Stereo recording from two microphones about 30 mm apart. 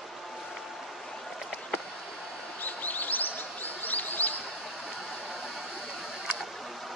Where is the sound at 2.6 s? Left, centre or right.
Left.